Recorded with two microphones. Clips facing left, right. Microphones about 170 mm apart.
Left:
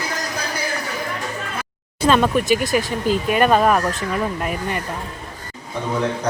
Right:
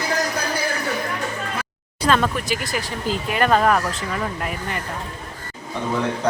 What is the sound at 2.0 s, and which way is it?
Speech, 20° left (ahead or behind).